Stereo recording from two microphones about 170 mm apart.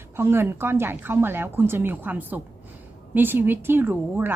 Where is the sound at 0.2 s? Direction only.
15° right (ahead or behind).